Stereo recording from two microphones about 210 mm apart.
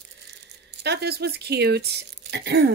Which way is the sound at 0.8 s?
50° right (ahead or behind).